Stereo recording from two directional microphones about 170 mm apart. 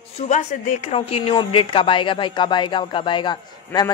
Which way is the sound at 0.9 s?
35° left (ahead or behind).